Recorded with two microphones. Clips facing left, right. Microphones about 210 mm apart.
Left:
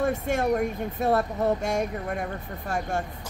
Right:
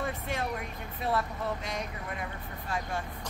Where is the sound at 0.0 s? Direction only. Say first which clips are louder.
Left 9 dB; 45° left (ahead or behind).